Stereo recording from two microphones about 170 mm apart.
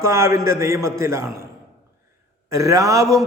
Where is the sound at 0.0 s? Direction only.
15° right (ahead or behind).